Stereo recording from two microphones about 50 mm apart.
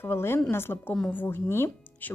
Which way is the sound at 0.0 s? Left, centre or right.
Left.